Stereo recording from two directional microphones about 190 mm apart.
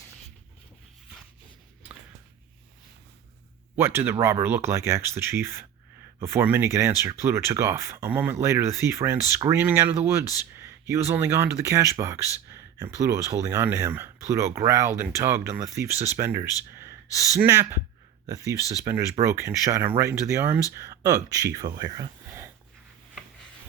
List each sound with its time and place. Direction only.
3.8 s speech: 10° right (ahead or behind)